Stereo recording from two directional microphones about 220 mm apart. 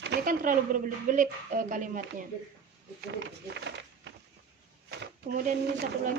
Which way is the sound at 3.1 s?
50° right (ahead or behind).